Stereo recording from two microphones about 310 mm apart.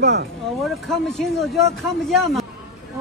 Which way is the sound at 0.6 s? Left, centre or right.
Centre.